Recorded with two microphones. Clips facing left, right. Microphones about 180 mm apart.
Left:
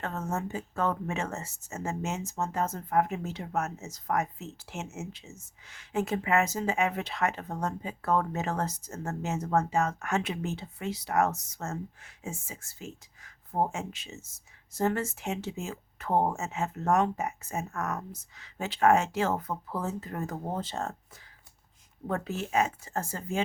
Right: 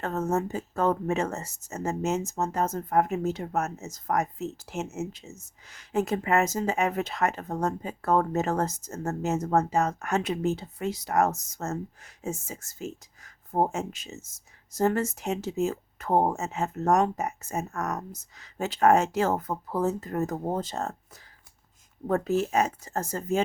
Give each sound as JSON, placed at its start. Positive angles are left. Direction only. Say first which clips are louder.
{"t": 0.0, "sound": "speech", "louder": "right 6 dB", "side_deg": -40}
{"t": 22.0, "sound": "speech", "louder": "right 7 dB", "side_deg": -40}